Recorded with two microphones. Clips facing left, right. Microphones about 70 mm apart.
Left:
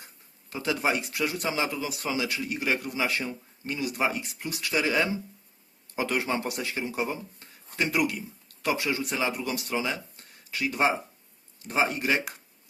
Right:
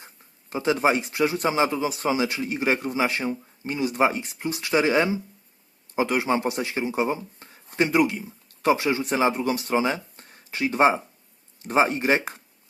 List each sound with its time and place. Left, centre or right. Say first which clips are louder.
0.5 s speech: right 6 dB; right